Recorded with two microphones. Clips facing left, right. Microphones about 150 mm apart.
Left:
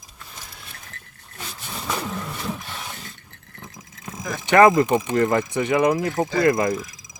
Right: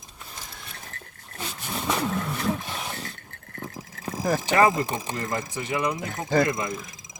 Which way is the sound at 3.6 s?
35° right (ahead or behind).